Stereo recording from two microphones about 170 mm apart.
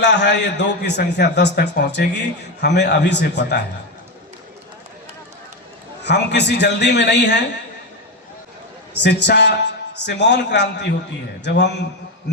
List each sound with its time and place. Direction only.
0.0 s a man's voice: 90° left
6.0 s a man's voice: 90° left
9.0 s a man's voice: 80° left